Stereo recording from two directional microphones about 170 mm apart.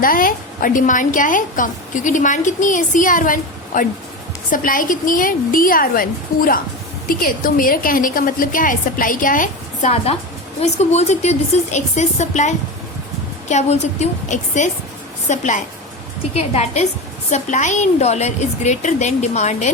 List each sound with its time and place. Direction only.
0.0 s a woman's voice: 55° left (ahead or behind)
10.6 s a woman's voice: 40° left (ahead or behind)